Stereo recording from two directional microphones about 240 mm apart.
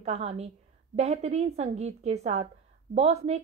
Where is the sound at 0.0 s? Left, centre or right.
Right.